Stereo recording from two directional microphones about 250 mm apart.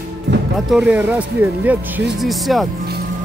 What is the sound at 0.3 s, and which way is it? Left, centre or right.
Music, right.